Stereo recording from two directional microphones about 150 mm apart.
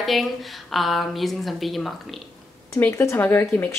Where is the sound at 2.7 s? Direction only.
20° left (ahead or behind).